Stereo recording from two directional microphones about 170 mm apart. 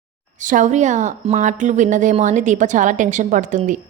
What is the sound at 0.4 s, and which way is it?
A woman's voice, 50° right (ahead or behind).